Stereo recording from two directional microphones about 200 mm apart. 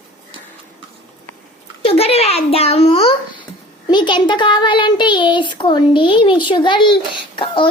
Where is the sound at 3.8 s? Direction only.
25° left (ahead or behind).